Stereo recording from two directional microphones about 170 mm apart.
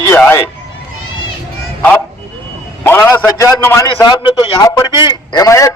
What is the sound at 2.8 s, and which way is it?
A man's voice, 15° left (ahead or behind).